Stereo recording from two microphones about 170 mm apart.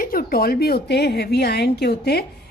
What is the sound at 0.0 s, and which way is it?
A woman's voice, 60° left (ahead or behind).